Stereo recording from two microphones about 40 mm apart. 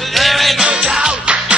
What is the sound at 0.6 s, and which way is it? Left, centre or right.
Music, centre.